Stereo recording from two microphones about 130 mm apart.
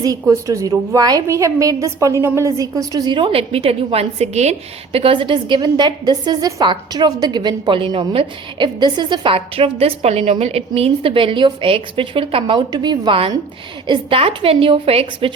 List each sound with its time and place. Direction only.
0.0 s a woman's voice: 25° right (ahead or behind); by 15.3 s 45° right (ahead or behind)